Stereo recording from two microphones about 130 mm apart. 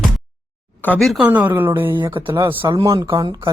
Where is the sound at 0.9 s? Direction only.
Centre (ahead or behind).